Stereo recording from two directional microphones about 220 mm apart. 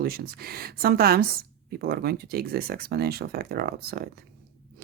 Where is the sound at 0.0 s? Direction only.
45° right (ahead or behind).